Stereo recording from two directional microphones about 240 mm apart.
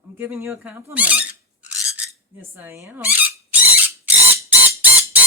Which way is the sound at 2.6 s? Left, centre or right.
Centre.